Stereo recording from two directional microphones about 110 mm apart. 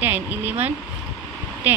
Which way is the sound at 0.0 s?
15° right (ahead or behind).